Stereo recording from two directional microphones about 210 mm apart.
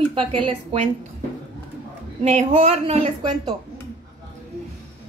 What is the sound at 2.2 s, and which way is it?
A woman's voice, 30° right (ahead or behind).